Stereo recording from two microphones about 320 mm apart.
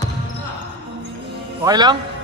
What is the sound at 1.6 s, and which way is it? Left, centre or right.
Speech, centre.